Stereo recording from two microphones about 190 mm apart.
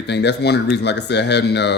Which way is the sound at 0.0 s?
65° left (ahead or behind).